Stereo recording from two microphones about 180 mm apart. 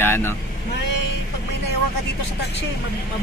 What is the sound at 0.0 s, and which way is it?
Vehicle, 10° left (ahead or behind).